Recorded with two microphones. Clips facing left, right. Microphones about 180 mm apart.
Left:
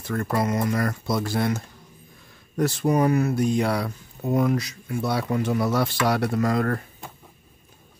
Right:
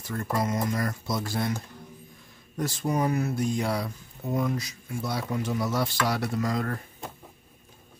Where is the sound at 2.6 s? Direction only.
65° left (ahead or behind).